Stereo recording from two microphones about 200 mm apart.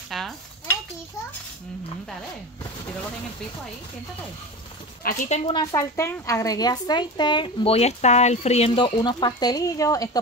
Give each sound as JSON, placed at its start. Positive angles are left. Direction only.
{"t": 0.1, "sound": "dishes", "side_deg": 0}
{"t": 5.0, "sound": "speech", "side_deg": 40}
{"t": 5.5, "sound": "a woman's voice", "side_deg": 20}